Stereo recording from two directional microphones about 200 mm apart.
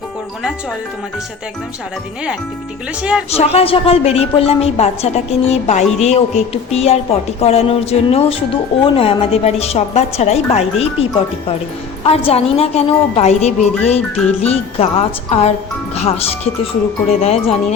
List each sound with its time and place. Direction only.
3.0 s speech: 5° right (ahead or behind)
3.2 s a woman's voice: 30° left (ahead or behind)
12.0 s a woman's voice: 30° left (ahead or behind)
14.4 s music: 30° left (ahead or behind)
16.0 s a woman's voice: 30° left (ahead or behind)